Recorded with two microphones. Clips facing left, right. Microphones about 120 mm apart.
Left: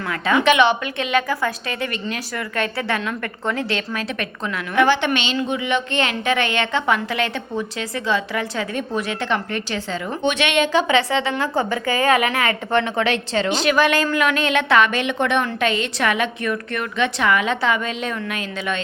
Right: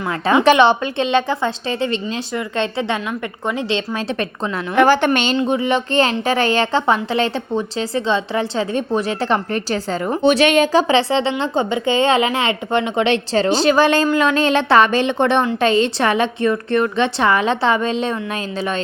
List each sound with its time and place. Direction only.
0.1 s speech: 30° right (ahead or behind)
4.7 s a woman's voice: 45° right (ahead or behind); by 13.1 s 20° right (ahead or behind)
13.3 s a woman's voice: 35° right (ahead or behind)